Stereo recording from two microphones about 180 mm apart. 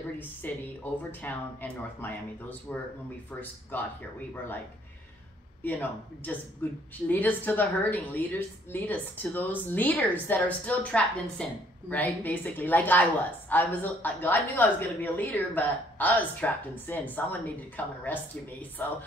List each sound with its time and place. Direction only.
0.4 s a woman's voice: 10° left (ahead or behind)
5.6 s a woman's voice: 10° left (ahead or behind)